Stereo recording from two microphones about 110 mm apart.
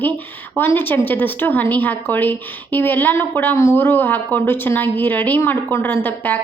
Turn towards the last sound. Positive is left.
turn(degrees=15)  # may be behind; listen again after turning